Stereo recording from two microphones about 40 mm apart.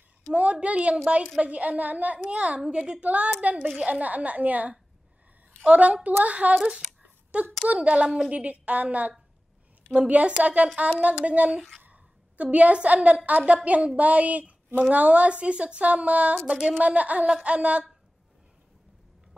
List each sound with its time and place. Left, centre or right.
0.3 s a woman's voice: right
1.4 s a woman's voice: right
6.5 s speech: right
7.0 s a sound: right
7.6 s a woman's voice: right